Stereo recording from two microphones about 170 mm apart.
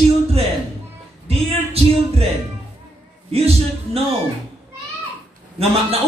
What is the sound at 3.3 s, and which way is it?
Speech, 35° right (ahead or behind).